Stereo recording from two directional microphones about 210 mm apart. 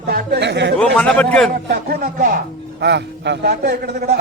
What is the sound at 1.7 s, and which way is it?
A man's voice, 45° right (ahead or behind).